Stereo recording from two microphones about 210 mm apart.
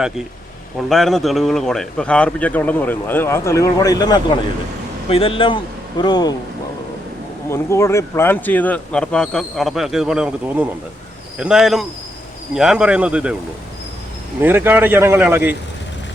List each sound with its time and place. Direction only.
0.8 s a man's voice: centre (ahead or behind); by 6.3 s 20° left (ahead or behind)
7.5 s speech: 10° left (ahead or behind); by 13.3 s 5° right (ahead or behind)
14.4 s a man's voice: 10° right (ahead or behind)